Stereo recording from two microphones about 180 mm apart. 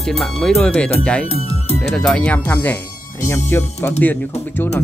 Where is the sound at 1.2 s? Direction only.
35° left (ahead or behind).